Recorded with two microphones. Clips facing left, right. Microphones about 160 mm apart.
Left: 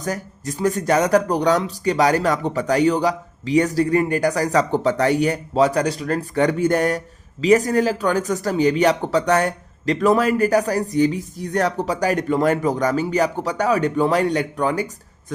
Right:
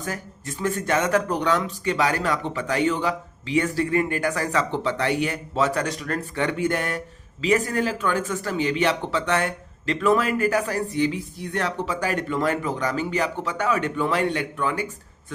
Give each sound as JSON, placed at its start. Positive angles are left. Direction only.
{"t": 0.0, "sound": "speech", "side_deg": 40}